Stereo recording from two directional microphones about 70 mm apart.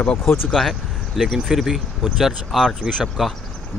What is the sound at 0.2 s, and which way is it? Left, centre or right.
Speech, left.